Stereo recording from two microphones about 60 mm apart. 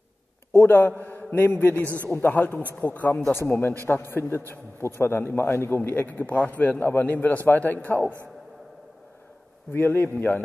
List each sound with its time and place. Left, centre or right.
0.5 s a man's voice: left
3.3 s a man's voice: left
5.8 s a man's voice: left
9.7 s a man's voice: left